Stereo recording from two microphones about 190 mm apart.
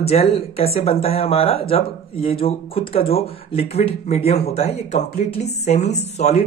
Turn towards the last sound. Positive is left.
turn(degrees=35)  # may be behind; listen again after turning